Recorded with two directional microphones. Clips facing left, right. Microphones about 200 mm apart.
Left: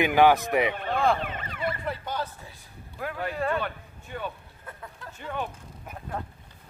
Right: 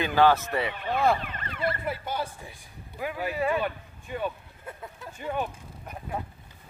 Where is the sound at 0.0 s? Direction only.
15° left (ahead or behind).